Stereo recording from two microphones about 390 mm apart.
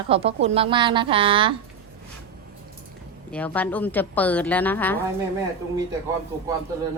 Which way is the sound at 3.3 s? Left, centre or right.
Centre.